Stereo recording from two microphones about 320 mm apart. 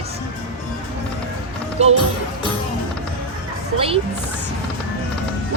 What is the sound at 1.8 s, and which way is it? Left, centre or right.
Speech, centre.